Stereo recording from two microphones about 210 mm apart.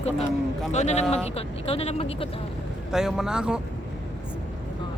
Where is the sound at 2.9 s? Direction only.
Centre (ahead or behind).